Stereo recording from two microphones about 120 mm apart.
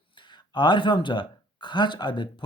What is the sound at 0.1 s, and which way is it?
Speech, 40° left (ahead or behind).